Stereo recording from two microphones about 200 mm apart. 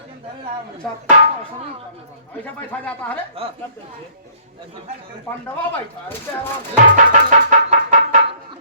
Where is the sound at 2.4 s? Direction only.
10° left (ahead or behind).